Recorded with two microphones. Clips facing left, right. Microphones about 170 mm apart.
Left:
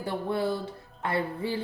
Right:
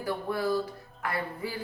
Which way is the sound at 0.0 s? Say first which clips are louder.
Left 1 dB; 25° left (ahead or behind).